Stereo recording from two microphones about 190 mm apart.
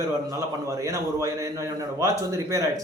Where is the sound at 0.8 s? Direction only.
15° right (ahead or behind).